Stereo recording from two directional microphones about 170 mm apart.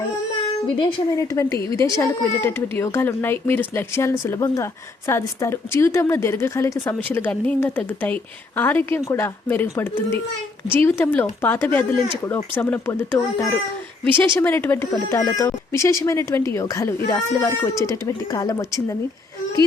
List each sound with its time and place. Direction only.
0.8 s a woman's voice: 20° left (ahead or behind)